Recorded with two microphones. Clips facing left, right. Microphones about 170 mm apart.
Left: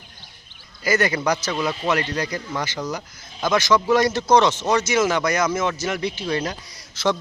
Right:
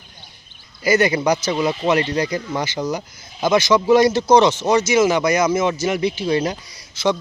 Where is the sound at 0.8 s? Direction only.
20° right (ahead or behind).